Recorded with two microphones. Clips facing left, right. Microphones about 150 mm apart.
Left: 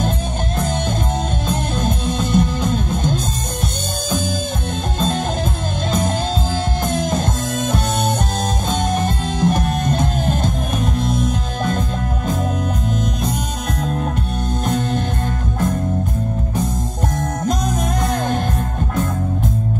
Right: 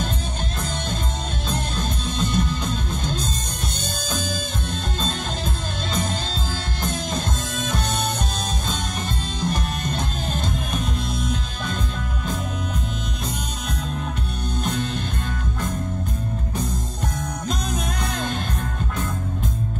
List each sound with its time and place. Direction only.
1.8 s music: 50° left (ahead or behind)
7.0 s music: 50° left (ahead or behind)
8.6 s music: 50° left (ahead or behind)
14.6 s music: 50° left (ahead or behind)